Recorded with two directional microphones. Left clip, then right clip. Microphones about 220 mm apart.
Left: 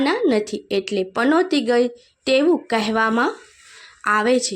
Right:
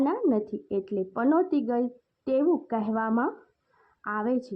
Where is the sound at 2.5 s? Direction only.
30° left (ahead or behind).